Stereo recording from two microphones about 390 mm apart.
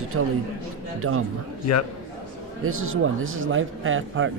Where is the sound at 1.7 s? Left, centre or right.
Left.